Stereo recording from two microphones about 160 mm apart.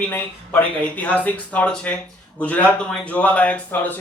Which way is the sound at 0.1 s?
10° left (ahead or behind).